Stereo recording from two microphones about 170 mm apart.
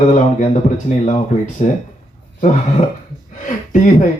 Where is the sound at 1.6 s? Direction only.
40° left (ahead or behind).